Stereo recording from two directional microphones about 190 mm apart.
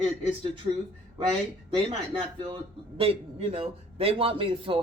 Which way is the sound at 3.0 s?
30° right (ahead or behind).